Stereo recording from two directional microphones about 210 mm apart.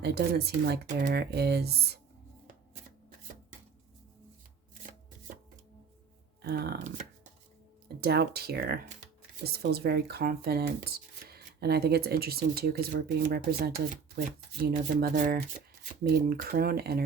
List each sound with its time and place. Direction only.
0.0 s speech: 50° right (ahead or behind)
6.4 s speech: 50° right (ahead or behind)
8.0 s speech: 50° right (ahead or behind)